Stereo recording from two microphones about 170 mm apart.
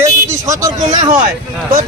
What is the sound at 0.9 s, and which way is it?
Speech, 40° right (ahead or behind).